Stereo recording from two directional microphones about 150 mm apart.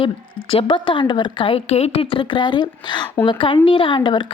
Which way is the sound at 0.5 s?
35° left (ahead or behind).